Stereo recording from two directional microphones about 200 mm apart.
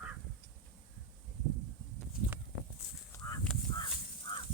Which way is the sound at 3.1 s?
15° left (ahead or behind).